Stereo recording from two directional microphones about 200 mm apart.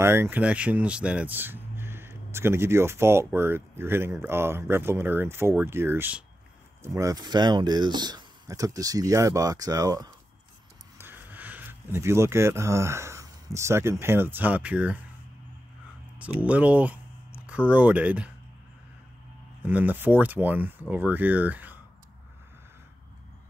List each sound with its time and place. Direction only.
0.0 s speech: 10° right (ahead or behind)
16.2 s speech: 10° right (ahead or behind)
19.6 s speech: 10° right (ahead or behind)